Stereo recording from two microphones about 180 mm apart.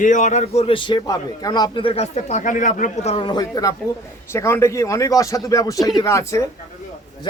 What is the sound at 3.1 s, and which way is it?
A man's voice, 25° left (ahead or behind).